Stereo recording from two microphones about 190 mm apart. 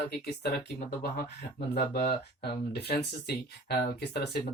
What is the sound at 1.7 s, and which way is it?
Speech, 55° left (ahead or behind).